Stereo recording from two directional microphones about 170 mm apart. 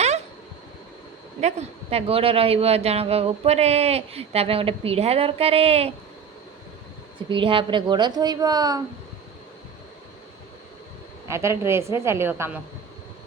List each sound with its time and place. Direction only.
1.4 s speech: 40° right (ahead or behind)
7.3 s a woman's voice: 30° right (ahead or behind)
11.3 s a woman's voice: 15° right (ahead or behind)